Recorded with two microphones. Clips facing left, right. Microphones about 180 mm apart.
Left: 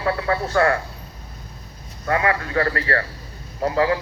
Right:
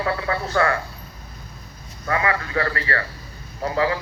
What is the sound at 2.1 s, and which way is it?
Speech, 40° left (ahead or behind).